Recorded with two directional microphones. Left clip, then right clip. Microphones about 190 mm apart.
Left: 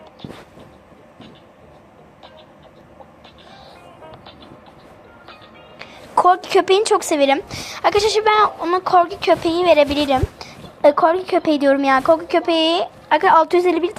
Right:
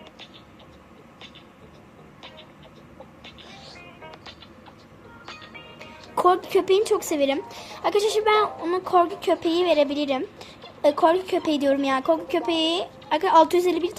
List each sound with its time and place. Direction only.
5.8 s speech: 10° left (ahead or behind)
10.0 s a woman's voice: 20° left (ahead or behind)
10.3 s speech: 10° left (ahead or behind)